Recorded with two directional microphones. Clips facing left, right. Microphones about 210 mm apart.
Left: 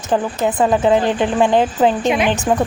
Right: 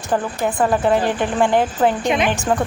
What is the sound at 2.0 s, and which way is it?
Speech, 5° left (ahead or behind).